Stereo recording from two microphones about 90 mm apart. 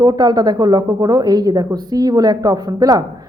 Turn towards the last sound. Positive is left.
turn(degrees=-45)  # may be behind; listen again after turning